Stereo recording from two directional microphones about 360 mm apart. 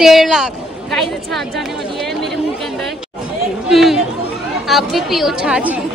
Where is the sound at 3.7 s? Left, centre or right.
Centre.